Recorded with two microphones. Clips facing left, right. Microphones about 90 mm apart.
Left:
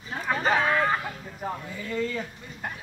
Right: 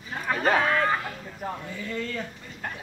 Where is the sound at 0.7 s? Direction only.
10° left (ahead or behind).